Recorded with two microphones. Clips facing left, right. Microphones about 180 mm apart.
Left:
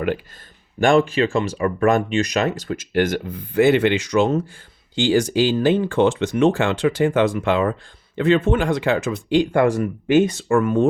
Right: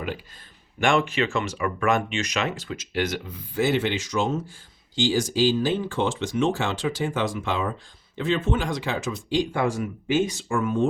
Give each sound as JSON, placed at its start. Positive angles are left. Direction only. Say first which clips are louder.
{"t": 0.8, "sound": "speech", "louder": "left 6 dB", "side_deg": 35}